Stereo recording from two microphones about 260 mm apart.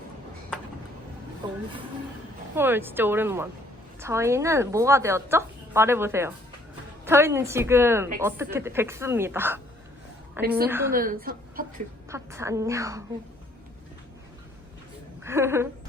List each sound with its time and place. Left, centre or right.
2.6 s a woman's voice: centre
10.9 s a woman's voice: right
12.0 s a woman's voice: centre
15.2 s a woman's voice: centre